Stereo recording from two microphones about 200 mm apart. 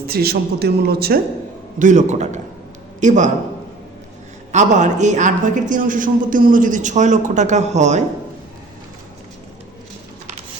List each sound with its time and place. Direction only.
0.1 s speech: 50° right (ahead or behind)
1.8 s speech: 35° right (ahead or behind)
4.5 s speech: 35° right (ahead or behind)